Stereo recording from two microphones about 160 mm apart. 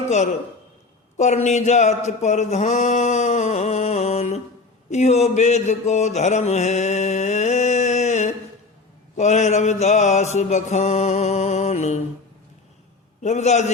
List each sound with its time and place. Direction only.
0.1 s speech: 45° left (ahead or behind)
4.9 s mantra: 45° left (ahead or behind)
9.1 s speech: 45° left (ahead or behind)
13.2 s speech: 45° left (ahead or behind)